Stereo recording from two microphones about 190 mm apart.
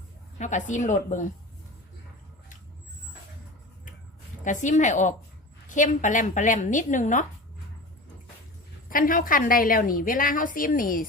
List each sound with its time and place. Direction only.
0.3 s a woman's voice: 40° left (ahead or behind)
4.4 s a woman's voice: 40° left (ahead or behind)
8.9 s a woman's voice: 45° left (ahead or behind)